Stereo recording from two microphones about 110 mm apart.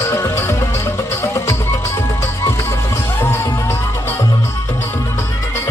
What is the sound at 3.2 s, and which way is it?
Music, 20° left (ahead or behind).